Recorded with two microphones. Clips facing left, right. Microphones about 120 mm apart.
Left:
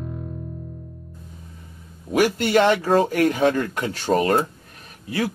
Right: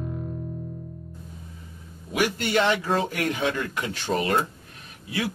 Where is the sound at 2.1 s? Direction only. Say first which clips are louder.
Left 6 dB; 40° left (ahead or behind).